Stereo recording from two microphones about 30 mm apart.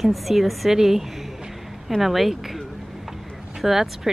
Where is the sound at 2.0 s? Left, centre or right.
Centre.